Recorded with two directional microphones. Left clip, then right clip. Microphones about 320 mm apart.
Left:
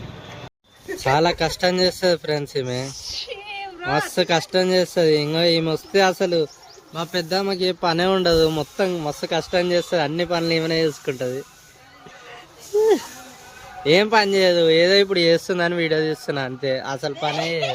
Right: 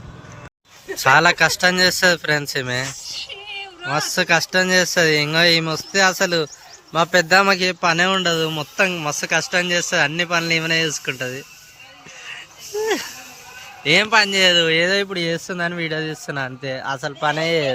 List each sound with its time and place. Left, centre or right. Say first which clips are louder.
1.0 s speech: right 5 dB; centre
6.9 s speech: right 9 dB; right
7.3 s speech: right 7 dB; centre
13.8 s speech: right 1 dB; centre